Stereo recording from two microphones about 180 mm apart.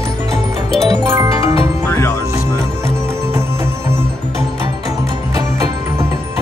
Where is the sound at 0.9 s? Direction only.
20° right (ahead or behind).